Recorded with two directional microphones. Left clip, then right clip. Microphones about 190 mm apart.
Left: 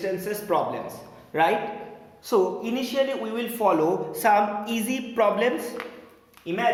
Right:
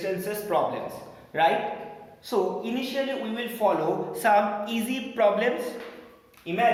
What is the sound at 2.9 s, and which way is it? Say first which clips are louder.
Speech: left 6 dB; 50° left (ahead or behind).